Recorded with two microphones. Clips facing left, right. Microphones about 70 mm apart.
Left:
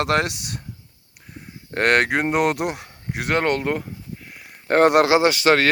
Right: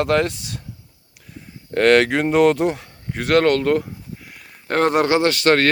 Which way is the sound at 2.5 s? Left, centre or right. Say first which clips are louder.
Right 5 dB; left.